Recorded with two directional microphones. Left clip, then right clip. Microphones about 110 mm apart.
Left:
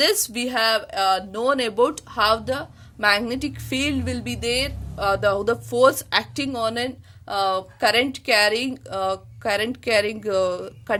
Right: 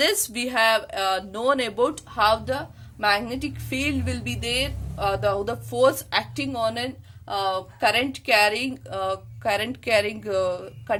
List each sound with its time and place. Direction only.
0.0 s speech: 35° left (ahead or behind); by 10.9 s 60° left (ahead or behind)